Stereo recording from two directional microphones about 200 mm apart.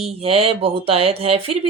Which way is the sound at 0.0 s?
30° right (ahead or behind).